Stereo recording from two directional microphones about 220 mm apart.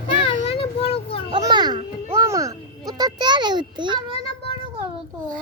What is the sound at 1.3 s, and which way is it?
A child's voice, 20° right (ahead or behind).